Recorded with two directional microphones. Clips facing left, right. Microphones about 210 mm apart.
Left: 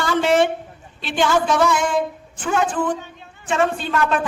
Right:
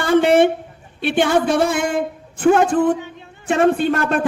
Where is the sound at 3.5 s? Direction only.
55° right (ahead or behind).